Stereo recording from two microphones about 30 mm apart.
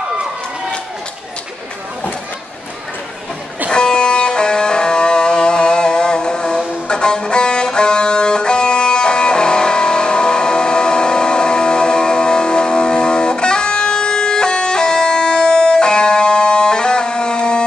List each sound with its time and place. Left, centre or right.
3.7 s music: left